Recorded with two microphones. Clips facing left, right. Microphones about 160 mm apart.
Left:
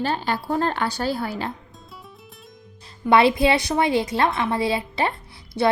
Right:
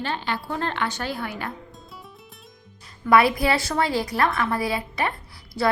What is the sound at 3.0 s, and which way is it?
A woman's voice, 25° left (ahead or behind).